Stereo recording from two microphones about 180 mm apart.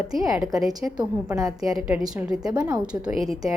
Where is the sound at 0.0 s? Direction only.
5° right (ahead or behind).